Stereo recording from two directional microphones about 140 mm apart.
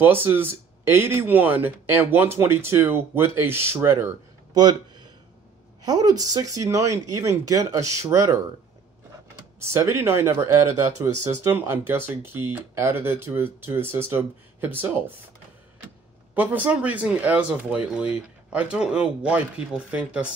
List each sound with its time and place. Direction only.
0.0 s speech: 15° right (ahead or behind)
4.6 s speech: 30° right (ahead or behind)
9.6 s speech: 20° right (ahead or behind)
16.3 s speech: 10° right (ahead or behind)